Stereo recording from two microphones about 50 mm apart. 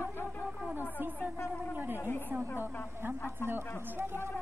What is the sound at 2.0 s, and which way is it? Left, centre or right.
Speech, left.